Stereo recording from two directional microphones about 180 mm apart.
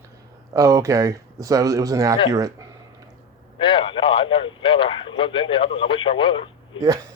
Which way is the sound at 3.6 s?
30° left (ahead or behind).